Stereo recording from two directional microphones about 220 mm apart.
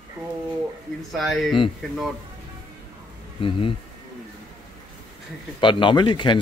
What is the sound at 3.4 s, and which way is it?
Speech, 25° left (ahead or behind).